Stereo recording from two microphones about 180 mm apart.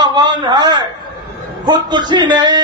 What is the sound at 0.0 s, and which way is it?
A man's voice, 25° right (ahead or behind).